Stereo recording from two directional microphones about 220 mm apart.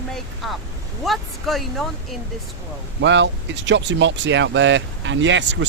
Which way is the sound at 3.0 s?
55° right (ahead or behind).